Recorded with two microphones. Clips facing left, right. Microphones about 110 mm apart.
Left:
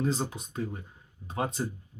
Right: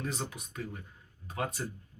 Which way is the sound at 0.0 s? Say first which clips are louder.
Left 7 dB; 30° left (ahead or behind).